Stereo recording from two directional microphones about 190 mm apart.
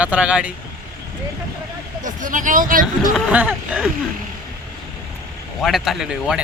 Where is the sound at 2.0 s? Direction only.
45° right (ahead or behind).